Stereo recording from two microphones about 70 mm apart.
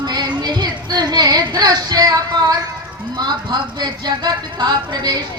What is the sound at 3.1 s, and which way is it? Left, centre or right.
Speech, right.